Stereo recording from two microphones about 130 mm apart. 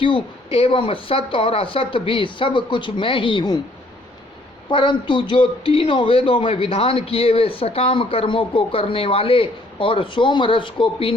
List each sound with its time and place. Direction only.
0.0 s speech: 45° left (ahead or behind)
4.7 s speech: 40° left (ahead or behind)